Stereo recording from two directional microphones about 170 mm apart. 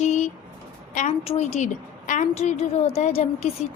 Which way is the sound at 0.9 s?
40° left (ahead or behind).